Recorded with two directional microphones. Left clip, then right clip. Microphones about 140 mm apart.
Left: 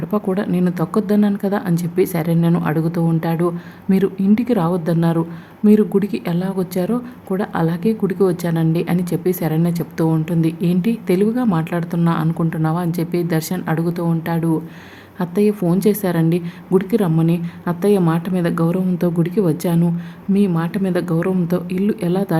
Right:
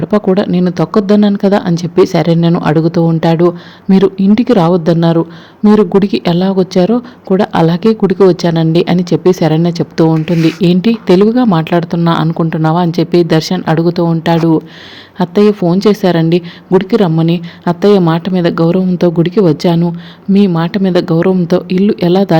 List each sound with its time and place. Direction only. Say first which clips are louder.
0.0 s a woman's voice: right 10 dB; 35° right (ahead or behind)